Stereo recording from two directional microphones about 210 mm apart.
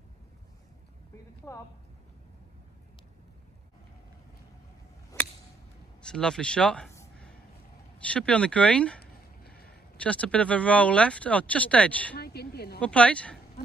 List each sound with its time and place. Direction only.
1.1 s clip-clop: 15° left (ahead or behind)
6.0 s speech: 5° left (ahead or behind)
6.9 s a sound: 15° left (ahead or behind)
8.0 s speech: 5° left (ahead or behind)
9.0 s a sound: 45° left (ahead or behind)
9.9 s speech: 5° left (ahead or behind)
12.2 s a woman's voice: 50° left (ahead or behind)
12.8 s speech: 5° left (ahead or behind)